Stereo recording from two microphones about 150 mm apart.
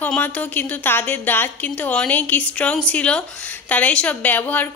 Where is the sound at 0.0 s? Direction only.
10° left (ahead or behind).